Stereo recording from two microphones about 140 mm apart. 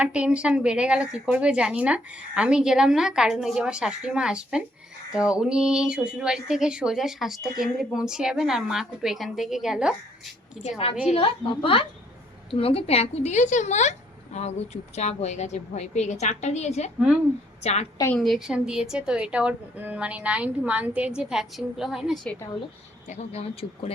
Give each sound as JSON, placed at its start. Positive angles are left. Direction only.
{"t": 0.0, "sound": "a woman's voice", "side_deg": -10}
{"t": 10.6, "sound": "a woman's voice", "side_deg": 45}
{"t": 18.1, "sound": "a woman's voice", "side_deg": 0}
{"t": 23.0, "sound": "a woman's voice", "side_deg": 50}